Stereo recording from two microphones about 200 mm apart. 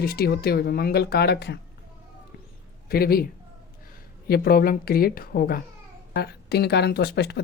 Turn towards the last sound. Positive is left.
turn(degrees=55)  # may be behind; listen again after turning